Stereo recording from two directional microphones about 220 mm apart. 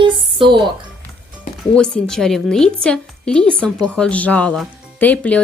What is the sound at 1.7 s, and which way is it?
A woman's voice, 5° left (ahead or behind).